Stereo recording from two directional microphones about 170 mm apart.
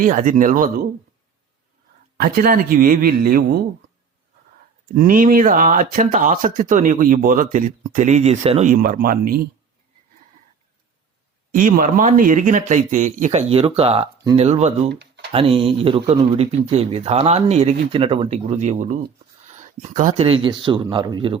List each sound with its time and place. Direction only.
0.0 s speech: 50° right (ahead or behind)
2.1 s a man's voice: 60° right (ahead or behind)
4.9 s speech: 55° right (ahead or behind)
8.7 s a man's voice: 55° right (ahead or behind)
11.5 s speech: 55° right (ahead or behind)
14.8 s a sound: 75° right (ahead or behind)
15.3 s speech: 30° right (ahead or behind)
19.5 s a sound: 45° right (ahead or behind)
20.2 s speech: 30° right (ahead or behind)